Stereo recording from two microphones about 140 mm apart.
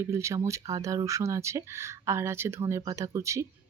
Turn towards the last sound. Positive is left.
turn(degrees=-20)  # may be behind; listen again after turning